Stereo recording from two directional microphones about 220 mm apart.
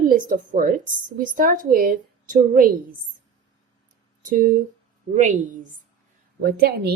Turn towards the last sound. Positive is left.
turn(degrees=-45)  # may be behind; listen again after turning